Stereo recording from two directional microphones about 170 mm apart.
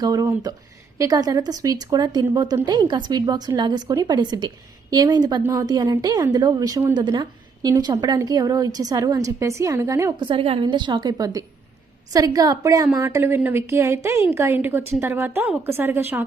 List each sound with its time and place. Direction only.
0.0 s a woman's voice: 20° right (ahead or behind)
10.2 s a woman's voice: 35° right (ahead or behind); by 16.2 s 10° right (ahead or behind)